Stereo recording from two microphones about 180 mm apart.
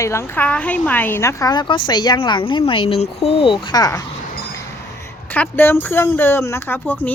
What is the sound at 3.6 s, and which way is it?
Speech, 20° left (ahead or behind).